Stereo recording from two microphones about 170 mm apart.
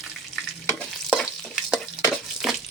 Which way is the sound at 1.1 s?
Centre (ahead or behind).